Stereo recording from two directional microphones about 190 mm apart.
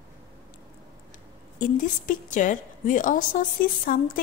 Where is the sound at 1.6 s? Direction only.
45° left (ahead or behind).